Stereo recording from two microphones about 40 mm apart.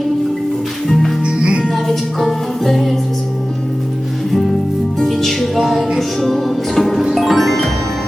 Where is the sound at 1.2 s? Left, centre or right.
Right.